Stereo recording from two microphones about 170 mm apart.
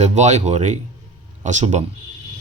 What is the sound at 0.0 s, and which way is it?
Speech, 45° right (ahead or behind).